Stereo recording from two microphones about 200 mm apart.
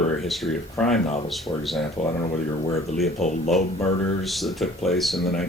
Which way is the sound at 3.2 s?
35° left (ahead or behind).